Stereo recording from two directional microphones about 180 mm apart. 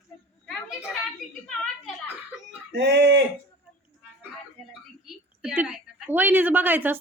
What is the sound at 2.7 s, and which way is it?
Speech, 75° right (ahead or behind).